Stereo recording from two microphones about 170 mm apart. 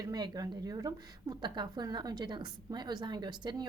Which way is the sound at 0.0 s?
25° right (ahead or behind).